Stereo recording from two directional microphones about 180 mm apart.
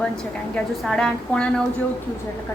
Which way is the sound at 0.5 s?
5° left (ahead or behind).